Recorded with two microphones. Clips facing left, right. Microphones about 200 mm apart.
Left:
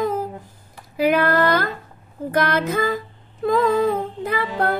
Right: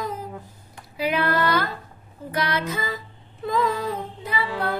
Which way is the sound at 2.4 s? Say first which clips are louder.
Left 6 dB; 50° left (ahead or behind).